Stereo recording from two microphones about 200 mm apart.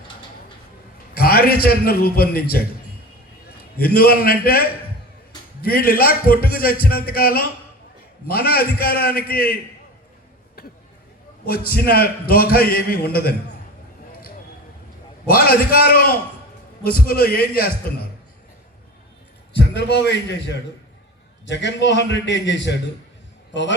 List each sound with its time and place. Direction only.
1.1 s a man's voice: 50° left (ahead or behind)
3.8 s a man's voice: 50° left (ahead or behind)
11.4 s a man's voice: 50° left (ahead or behind)
15.3 s a man's voice: 50° left (ahead or behind)
19.5 s a man's voice: 55° left (ahead or behind)